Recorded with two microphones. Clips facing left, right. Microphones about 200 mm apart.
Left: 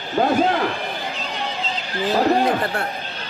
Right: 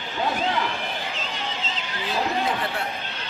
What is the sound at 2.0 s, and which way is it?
Speech, 40° left (ahead or behind).